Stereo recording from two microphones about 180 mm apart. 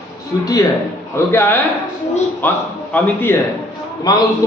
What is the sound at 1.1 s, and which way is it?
A man's voice, 15° left (ahead or behind).